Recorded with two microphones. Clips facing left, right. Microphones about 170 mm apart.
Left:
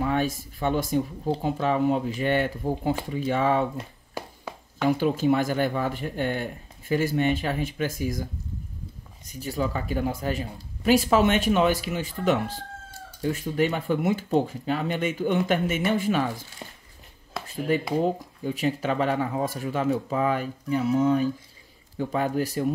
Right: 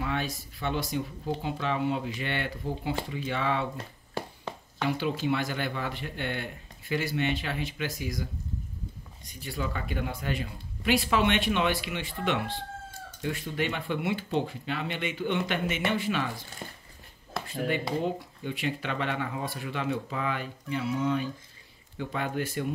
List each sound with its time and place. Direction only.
0.0 s speech: 45° left (ahead or behind)
3.7 s a sound: 10° left (ahead or behind)
4.8 s speech: 45° left (ahead or behind)
17.6 s speech: 40° left (ahead or behind)